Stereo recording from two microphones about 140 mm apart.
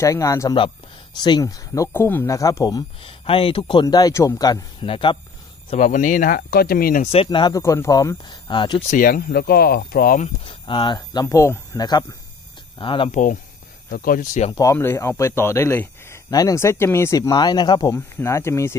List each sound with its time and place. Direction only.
0.0 s a man's voice: 25° left (ahead or behind)
3.0 s speech: 40° left (ahead or behind)
3.8 s a man's voice: 25° left (ahead or behind)
4.8 s speech: 40° left (ahead or behind)
5.8 s speech: 70° left (ahead or behind); by 7.1 s 90° left
7.2 s speech: 30° left (ahead or behind)
8.9 s speech: 90° left
10.2 s a man's voice: 40° left (ahead or behind); by 11.8 s 20° left (ahead or behind)
11.8 s a man's voice: 30° left (ahead or behind)
13.1 s speech: 65° left (ahead or behind)
13.8 s speech: 85° left; by 14.5 s 65° left (ahead or behind)
14.5 s a man's voice: 25° left (ahead or behind)
17.9 s a man's voice: 20° left (ahead or behind)